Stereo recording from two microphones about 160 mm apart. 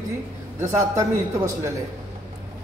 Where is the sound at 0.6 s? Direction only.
20° right (ahead or behind).